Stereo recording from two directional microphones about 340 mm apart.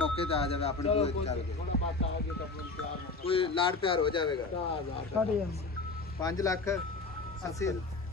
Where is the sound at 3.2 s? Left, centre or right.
Centre.